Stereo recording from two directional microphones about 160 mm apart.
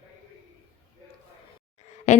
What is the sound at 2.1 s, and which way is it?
Speech, 45° left (ahead or behind).